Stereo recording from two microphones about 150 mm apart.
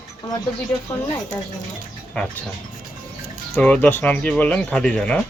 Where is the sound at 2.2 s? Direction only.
10° left (ahead or behind).